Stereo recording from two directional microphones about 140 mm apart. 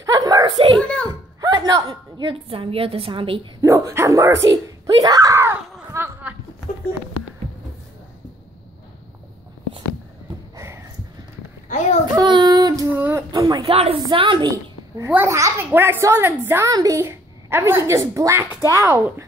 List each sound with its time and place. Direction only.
0.0 s chuckle: 25° right (ahead or behind)
0.7 s a sound: 10° left (ahead or behind)
1.0 s a woman's voice: 25° right (ahead or behind)
3.6 s a woman's voice: 20° right (ahead or behind)
5.0 s a sound: 25° right (ahead or behind)
10.5 s sniff: 20° right (ahead or behind)
11.7 s a sound: 60° left (ahead or behind)
12.2 s child singing: 30° right (ahead or behind)
12.9 s a child's voice: 15° right (ahead or behind)
13.3 s a woman's voice: 25° right (ahead or behind)
13.7 s a woman's voice: 45° right (ahead or behind)
15.0 s a child's voice: 20° right (ahead or behind)